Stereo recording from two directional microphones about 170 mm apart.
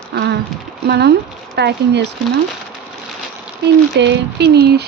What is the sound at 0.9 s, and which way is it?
Speech, 80° right.